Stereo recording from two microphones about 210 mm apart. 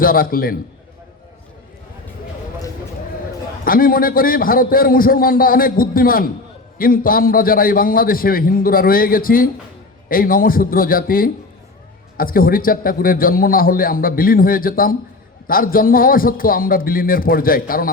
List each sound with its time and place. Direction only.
0.0 s a man's voice: 45° left (ahead or behind)
3.6 s a man's voice: 45° left (ahead or behind)